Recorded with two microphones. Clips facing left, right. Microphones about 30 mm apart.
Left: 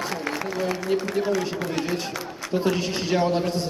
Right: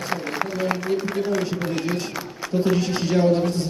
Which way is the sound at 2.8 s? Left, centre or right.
Centre.